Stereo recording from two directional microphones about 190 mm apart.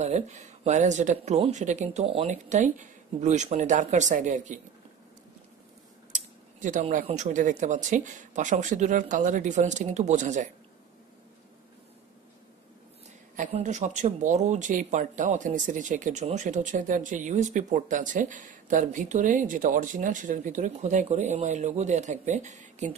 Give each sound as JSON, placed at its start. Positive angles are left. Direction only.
{"t": 0.0, "sound": "speech", "side_deg": -35}
{"t": 6.1, "sound": "speech", "side_deg": -40}
{"t": 13.4, "sound": "speech", "side_deg": -35}